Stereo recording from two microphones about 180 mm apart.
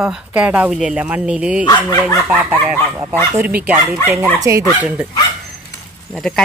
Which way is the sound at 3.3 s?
10° right (ahead or behind).